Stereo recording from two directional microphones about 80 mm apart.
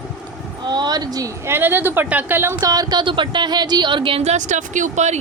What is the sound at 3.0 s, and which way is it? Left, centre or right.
Speech, right.